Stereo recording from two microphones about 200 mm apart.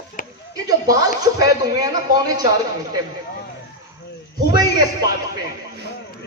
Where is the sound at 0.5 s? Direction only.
20° right (ahead or behind).